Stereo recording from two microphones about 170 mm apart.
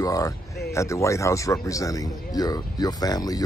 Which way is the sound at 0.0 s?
20° left (ahead or behind).